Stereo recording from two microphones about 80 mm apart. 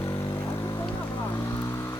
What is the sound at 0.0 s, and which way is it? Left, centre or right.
Vehicle, left.